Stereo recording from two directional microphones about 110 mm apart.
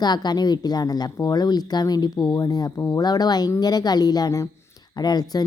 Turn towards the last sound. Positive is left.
turn(degrees=40)  # may be behind; listen again after turning